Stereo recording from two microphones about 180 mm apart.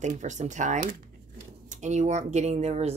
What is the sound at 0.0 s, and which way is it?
Speech, 40° right (ahead or behind).